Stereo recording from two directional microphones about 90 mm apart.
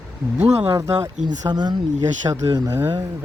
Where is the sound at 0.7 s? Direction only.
40° right (ahead or behind).